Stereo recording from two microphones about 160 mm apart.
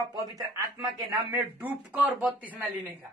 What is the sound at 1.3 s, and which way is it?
Speech, 5° right (ahead or behind).